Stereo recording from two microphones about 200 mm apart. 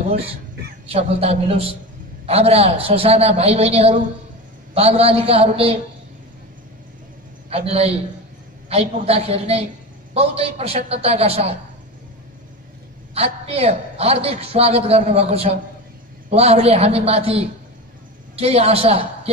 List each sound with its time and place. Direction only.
0.8 s a man's voice: 30° right (ahead or behind)
7.4 s a man's voice: 30° right (ahead or behind)
13.1 s a man's voice: 30° right (ahead or behind)